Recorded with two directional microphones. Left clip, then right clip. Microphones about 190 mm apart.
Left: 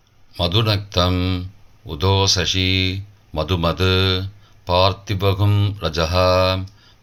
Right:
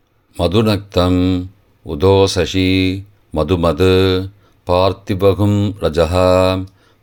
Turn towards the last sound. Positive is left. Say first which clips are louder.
# right 4 dB
turn(degrees=-45)  # may be behind; listen again after turning